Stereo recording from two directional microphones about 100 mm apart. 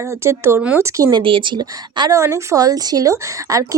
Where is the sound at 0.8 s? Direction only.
40° right (ahead or behind).